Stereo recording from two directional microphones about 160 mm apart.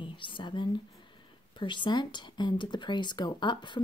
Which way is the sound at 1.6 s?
30° left (ahead or behind).